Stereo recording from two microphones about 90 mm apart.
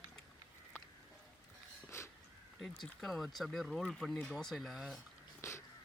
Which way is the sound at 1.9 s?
30° left (ahead or behind).